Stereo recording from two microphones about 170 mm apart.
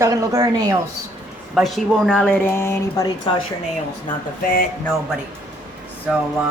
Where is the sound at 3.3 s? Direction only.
30° left (ahead or behind).